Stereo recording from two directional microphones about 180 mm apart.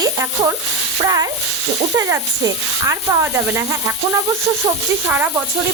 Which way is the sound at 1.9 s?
15° right (ahead or behind).